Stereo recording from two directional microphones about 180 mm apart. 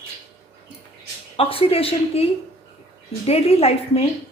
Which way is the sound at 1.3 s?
30° left (ahead or behind).